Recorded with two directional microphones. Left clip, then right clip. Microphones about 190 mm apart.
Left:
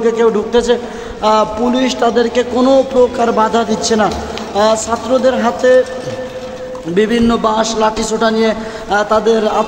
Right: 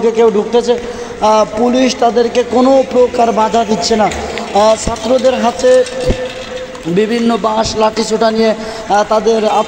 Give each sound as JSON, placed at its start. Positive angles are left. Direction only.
{"t": 0.0, "sound": "a man's voice", "side_deg": -20}
{"t": 7.0, "sound": "a man's voice", "side_deg": -25}